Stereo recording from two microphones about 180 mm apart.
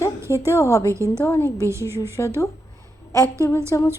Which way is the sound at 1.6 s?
15° right (ahead or behind).